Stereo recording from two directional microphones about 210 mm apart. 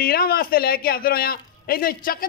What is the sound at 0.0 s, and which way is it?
A man's voice, 45° left (ahead or behind).